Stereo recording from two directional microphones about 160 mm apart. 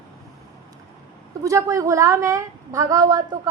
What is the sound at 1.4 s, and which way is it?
A child's voice, 20° right (ahead or behind).